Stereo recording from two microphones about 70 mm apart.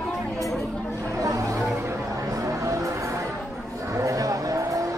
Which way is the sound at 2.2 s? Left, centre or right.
Right.